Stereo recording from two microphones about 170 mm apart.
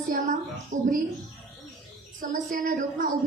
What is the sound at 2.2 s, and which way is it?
Speech, 50° right (ahead or behind).